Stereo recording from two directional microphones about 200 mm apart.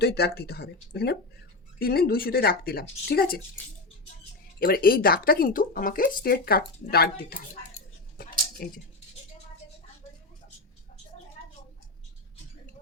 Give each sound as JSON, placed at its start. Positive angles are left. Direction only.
{"t": 0.0, "sound": "speech", "side_deg": 50}
{"t": 4.6, "sound": "speech", "side_deg": 45}
{"t": 8.2, "sound": "a sound", "side_deg": 45}